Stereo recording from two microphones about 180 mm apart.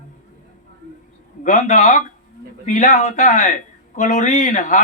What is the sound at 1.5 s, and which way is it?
A man's voice, 45° left (ahead or behind).